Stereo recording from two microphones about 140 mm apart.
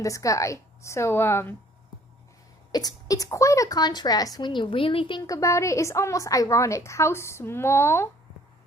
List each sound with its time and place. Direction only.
0.0 s a woman's voice: 25° left (ahead or behind)
2.7 s a woman's voice: 25° left (ahead or behind)
5.2 s a woman's voice: 25° left (ahead or behind)